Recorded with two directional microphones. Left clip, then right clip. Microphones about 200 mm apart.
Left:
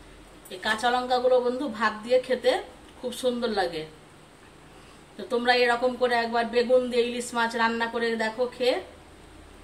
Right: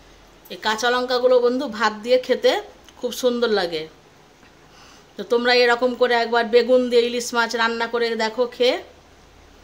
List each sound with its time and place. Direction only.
0.6 s speech: 55° right (ahead or behind)
5.1 s speech: 55° right (ahead or behind)